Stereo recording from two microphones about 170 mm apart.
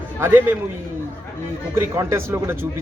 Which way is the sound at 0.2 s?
15° right (ahead or behind).